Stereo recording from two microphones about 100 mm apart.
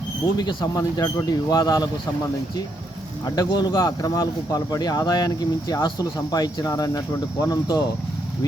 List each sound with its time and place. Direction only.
0.3 s speech: 40° left (ahead or behind)
3.2 s speech: 40° left (ahead or behind)